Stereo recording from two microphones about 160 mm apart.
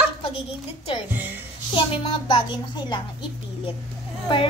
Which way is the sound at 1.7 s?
30° left (ahead or behind).